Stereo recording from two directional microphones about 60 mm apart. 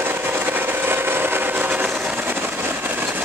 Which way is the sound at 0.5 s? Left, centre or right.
Right.